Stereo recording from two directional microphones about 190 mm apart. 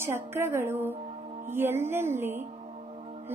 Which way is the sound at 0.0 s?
15° right (ahead or behind).